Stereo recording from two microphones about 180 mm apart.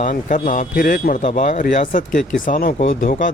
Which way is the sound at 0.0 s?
45° left (ahead or behind).